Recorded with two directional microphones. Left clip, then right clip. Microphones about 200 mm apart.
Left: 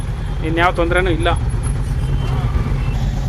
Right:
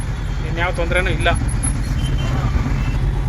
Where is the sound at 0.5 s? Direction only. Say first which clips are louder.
Left 5 dB; 25° left (ahead or behind).